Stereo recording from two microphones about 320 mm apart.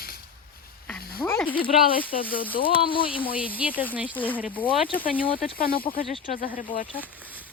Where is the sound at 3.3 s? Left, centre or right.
Centre.